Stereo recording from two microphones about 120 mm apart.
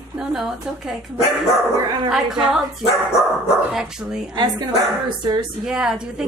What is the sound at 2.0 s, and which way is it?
Speech, 5° right (ahead or behind).